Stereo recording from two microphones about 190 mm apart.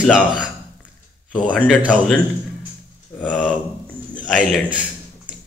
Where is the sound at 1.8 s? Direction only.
5° right (ahead or behind).